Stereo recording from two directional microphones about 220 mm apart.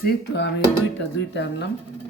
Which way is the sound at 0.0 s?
50° left (ahead or behind).